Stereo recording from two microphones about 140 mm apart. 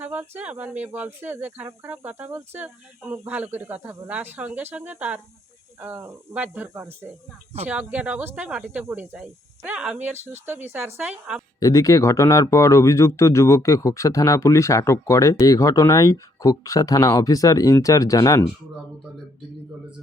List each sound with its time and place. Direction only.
0.0 s speech: 15° right (ahead or behind)
11.6 s speech: 25° left (ahead or behind)